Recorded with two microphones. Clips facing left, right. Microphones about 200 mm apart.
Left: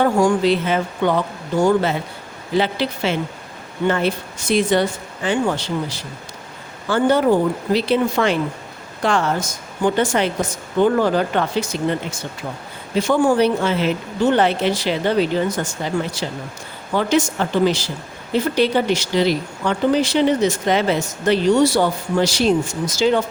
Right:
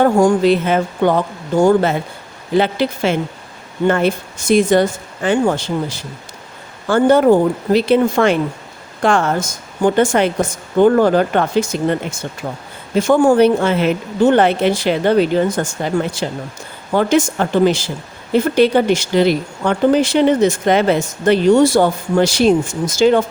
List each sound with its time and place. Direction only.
0.0 s speech: 45° right (ahead or behind)
13.0 s speech: 45° right (ahead or behind)